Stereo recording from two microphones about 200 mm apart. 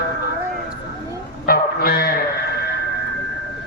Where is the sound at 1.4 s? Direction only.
50° left (ahead or behind).